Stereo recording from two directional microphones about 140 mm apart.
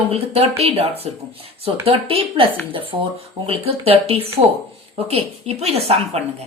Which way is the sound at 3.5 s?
45° right (ahead or behind).